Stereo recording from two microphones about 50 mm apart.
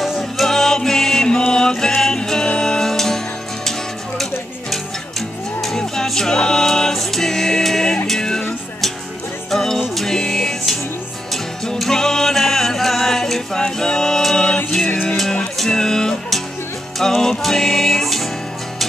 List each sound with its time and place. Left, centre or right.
0.4 s music: centre
5.6 s music: centre
9.5 s music: centre